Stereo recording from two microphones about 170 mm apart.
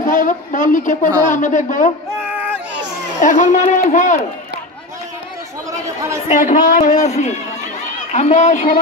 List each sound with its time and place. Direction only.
0.0 s a woman's voice: 50° left (ahead or behind)
3.2 s a woman's voice: 50° left (ahead or behind)
6.2 s a woman's voice: 50° left (ahead or behind)